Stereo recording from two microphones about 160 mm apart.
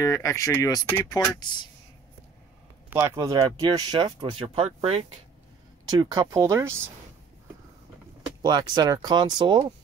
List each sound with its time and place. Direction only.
0.0 s speech: 20° left (ahead or behind)
2.9 s speech: 20° right (ahead or behind); by 5.0 s 40° right (ahead or behind)
5.9 s speech: 25° right (ahead or behind)
8.4 s speech: 25° right (ahead or behind)